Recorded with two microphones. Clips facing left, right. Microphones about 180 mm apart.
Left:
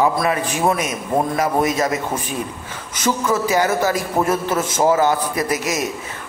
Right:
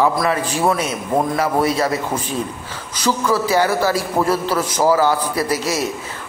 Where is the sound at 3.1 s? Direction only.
20° left (ahead or behind).